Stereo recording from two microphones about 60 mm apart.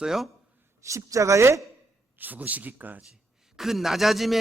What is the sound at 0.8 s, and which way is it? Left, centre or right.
Speech, right.